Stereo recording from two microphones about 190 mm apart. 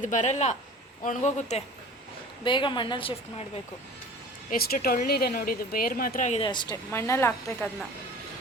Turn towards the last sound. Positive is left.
turn(degrees=10)  # may be behind; listen again after turning